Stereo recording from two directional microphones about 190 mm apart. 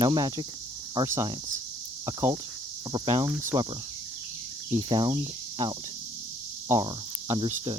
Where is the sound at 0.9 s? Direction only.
15° right (ahead or behind).